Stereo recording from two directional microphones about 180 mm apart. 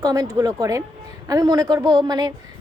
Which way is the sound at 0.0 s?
20° right (ahead or behind).